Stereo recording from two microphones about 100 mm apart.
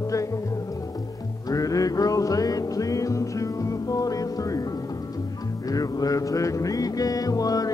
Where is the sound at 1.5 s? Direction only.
35° left (ahead or behind).